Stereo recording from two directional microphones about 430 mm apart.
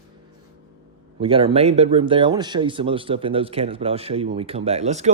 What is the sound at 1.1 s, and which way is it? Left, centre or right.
Speech, centre.